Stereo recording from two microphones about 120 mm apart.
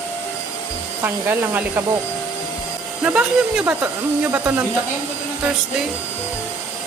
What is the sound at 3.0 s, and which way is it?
Speech, 10° right (ahead or behind).